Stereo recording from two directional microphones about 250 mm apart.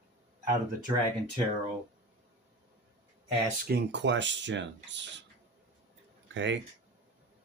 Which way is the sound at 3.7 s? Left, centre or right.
Right.